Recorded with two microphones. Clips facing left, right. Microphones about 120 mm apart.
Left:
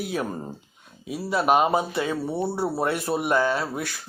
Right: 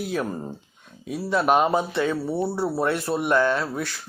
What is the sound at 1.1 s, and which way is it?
Speech, 5° left (ahead or behind).